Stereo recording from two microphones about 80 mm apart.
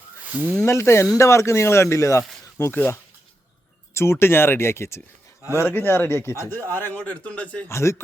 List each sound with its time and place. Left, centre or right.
0.3 s speech: centre
0.6 s a man's voice: left; by 7.6 s centre
7.7 s speech: left